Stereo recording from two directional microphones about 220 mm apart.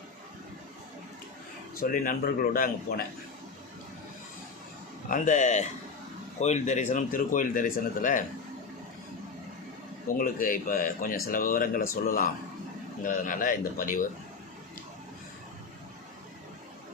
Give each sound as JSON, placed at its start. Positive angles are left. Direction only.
{"t": 1.7, "sound": "speech", "side_deg": 40}
{"t": 5.0, "sound": "speech", "side_deg": 35}
{"t": 10.1, "sound": "speech", "side_deg": 40}